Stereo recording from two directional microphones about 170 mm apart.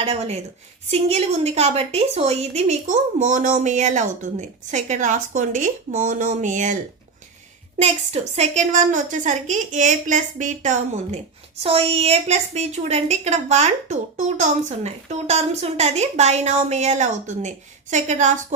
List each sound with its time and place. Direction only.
0.0 s a woman's voice: 35° right (ahead or behind)
7.8 s a woman's voice: 40° right (ahead or behind)
11.6 s a woman's voice: 35° right (ahead or behind)